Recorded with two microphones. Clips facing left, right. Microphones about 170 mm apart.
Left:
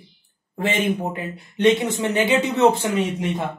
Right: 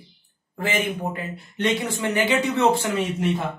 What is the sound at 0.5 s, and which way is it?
Speech, 25° left (ahead or behind).